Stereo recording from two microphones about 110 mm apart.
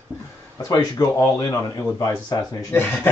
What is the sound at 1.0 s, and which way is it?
Speech, 35° left (ahead or behind).